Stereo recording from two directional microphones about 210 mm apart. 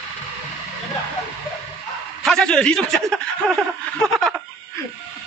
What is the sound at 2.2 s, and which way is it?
A man's voice, centre (ahead or behind).